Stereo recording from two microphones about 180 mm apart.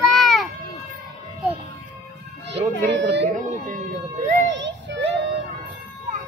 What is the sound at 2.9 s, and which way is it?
Speech, 75° right (ahead or behind).